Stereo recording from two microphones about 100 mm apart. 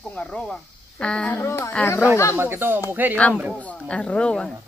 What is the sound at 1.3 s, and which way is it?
Speech, 25° left (ahead or behind).